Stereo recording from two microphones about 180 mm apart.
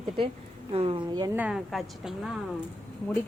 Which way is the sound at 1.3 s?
5° right (ahead or behind).